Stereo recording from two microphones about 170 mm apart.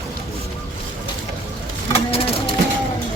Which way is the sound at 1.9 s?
35° left (ahead or behind).